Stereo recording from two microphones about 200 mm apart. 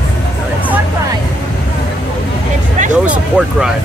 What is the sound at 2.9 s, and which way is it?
Speech, 5° right (ahead or behind).